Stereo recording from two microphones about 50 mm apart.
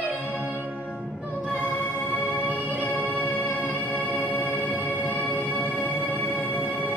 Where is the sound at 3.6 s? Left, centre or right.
Right.